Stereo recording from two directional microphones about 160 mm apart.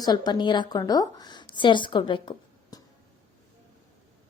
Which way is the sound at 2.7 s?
25° left (ahead or behind).